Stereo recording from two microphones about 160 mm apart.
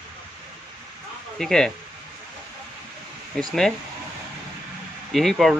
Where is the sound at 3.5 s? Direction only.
Centre (ahead or behind).